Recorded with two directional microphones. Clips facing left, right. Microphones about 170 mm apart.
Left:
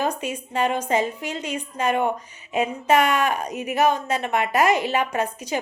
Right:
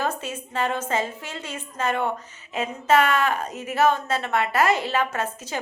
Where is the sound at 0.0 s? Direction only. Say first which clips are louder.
Left 2 dB; 15° left (ahead or behind).